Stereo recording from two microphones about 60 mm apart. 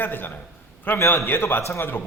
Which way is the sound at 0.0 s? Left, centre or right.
Left.